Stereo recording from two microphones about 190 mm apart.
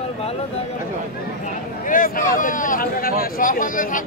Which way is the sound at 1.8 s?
45° left (ahead or behind).